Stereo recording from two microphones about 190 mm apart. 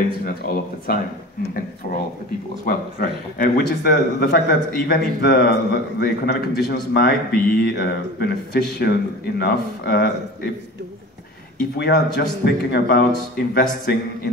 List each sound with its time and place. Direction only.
0.2 s a man's voice: 50° left (ahead or behind)
2.6 s a man's voice: 50° left (ahead or behind)
11.7 s speech: 55° left (ahead or behind)